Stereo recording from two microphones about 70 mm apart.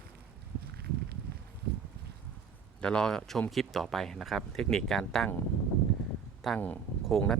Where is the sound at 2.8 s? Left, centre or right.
Centre.